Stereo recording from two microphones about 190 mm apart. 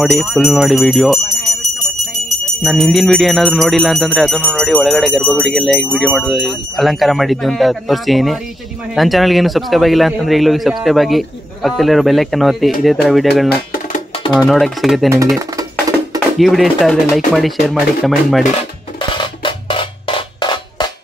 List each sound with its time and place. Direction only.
0.0 s a man's voice: centre (ahead or behind)
16.3 s a man's voice: centre (ahead or behind)
18.4 s music: 30° left (ahead or behind)